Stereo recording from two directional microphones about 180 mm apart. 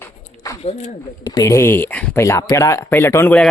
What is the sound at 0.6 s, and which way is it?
Speech, 35° left (ahead or behind).